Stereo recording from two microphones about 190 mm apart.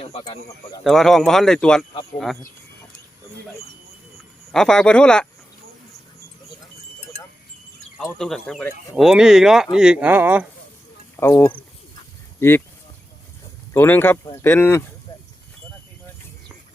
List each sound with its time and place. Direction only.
0.0 s speech: 30° left (ahead or behind)
0.9 s speech: centre (ahead or behind)
4.5 s speech: 5° left (ahead or behind)
7.9 s speech: centre (ahead or behind)
11.2 s speech: 10° left (ahead or behind)
13.7 s speech: 10° left (ahead or behind)